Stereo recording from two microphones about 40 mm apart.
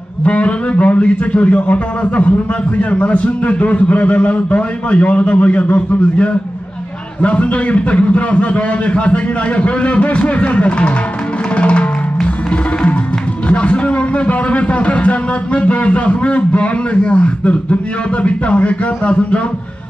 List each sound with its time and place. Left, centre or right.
0.2 s a man's voice: left
11.5 s music: left
13.5 s a man's voice: left